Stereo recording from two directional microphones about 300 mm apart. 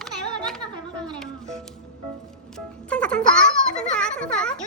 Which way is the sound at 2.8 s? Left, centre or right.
Centre.